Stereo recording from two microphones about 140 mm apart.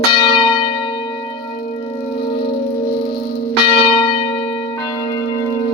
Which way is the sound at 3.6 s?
40° left (ahead or behind).